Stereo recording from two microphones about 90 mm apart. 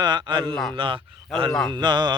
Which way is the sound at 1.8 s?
55° right (ahead or behind).